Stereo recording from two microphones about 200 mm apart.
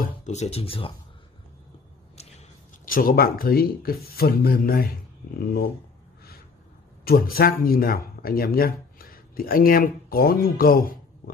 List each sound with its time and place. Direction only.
0.0 s speech: 35° left (ahead or behind)
2.8 s speech: 45° left (ahead or behind)
7.1 s speech: 45° left (ahead or behind)